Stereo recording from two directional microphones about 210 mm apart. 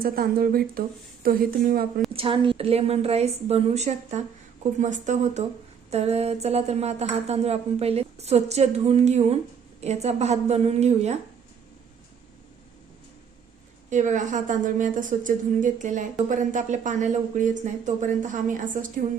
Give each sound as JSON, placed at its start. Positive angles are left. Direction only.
{"t": 0.0, "sound": "speech", "side_deg": -45}
{"t": 2.1, "sound": "a woman's voice", "side_deg": -25}
{"t": 13.9, "sound": "a woman's voice", "side_deg": -35}